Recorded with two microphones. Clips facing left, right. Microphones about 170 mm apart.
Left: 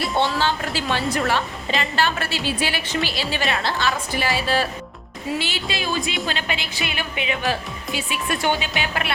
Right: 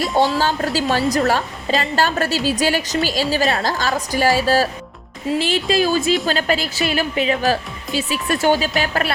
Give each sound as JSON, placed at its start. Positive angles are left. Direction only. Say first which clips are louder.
{"t": 0.3, "sound": "a woman's voice", "louder": "right 4 dB", "side_deg": -40}